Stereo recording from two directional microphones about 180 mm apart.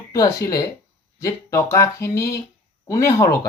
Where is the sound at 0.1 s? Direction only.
15° left (ahead or behind).